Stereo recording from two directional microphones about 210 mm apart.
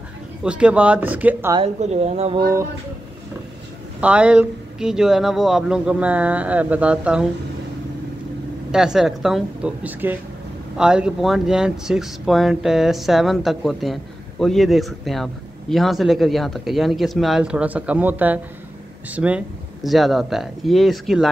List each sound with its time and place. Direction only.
0.4 s speech: 5° right (ahead or behind)
1.6 s speech: 30° right (ahead or behind)
4.0 s speech: 5° right (ahead or behind)
8.7 s speech: 5° right (ahead or behind)